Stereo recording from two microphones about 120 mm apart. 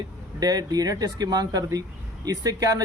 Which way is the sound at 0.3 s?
30° right (ahead or behind).